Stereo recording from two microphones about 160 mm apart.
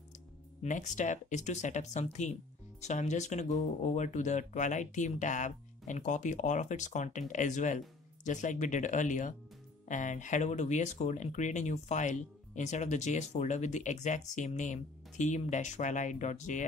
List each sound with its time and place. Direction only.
0.6 s speech: 50° left (ahead or behind)